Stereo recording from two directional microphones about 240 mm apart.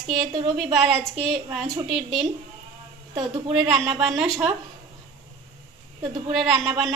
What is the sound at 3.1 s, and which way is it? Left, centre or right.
Speech, centre.